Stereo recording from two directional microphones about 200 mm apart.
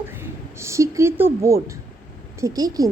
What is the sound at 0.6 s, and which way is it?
A woman's voice, 15° right (ahead or behind).